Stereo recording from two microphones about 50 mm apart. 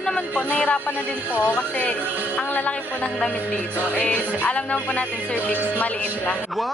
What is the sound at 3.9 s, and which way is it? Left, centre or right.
Speech, left.